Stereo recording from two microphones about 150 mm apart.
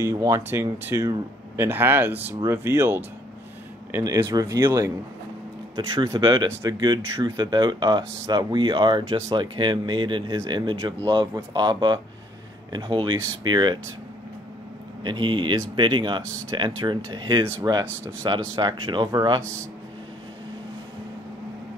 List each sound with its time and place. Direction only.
0.0 s speech: 20° right (ahead or behind)
5.8 s speech: 30° right (ahead or behind)
15.0 s speech: 30° right (ahead or behind)